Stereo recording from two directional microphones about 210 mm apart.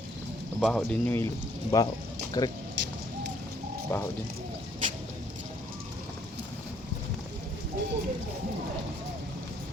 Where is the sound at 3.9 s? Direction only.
10° left (ahead or behind).